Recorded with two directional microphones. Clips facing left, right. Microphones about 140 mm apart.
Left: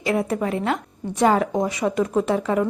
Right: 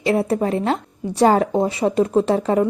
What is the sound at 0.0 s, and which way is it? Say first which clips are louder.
A woman's voice: right 4 dB; 30° right (ahead or behind).